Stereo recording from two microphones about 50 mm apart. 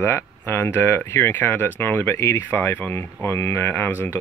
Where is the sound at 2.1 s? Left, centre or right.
Left.